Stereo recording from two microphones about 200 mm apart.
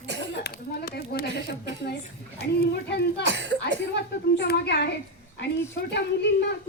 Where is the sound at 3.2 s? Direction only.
60° right (ahead or behind).